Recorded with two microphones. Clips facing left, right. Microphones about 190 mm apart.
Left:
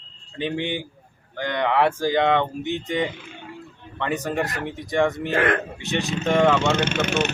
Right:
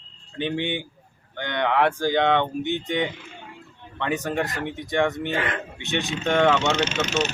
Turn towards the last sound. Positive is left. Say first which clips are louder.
# left 1 dB
turn(degrees=60)  # may be behind; listen again after turning